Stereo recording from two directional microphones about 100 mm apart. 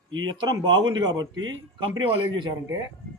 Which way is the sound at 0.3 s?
45° right (ahead or behind).